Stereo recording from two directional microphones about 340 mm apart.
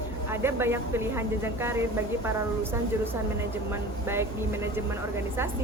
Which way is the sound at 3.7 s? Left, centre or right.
Centre.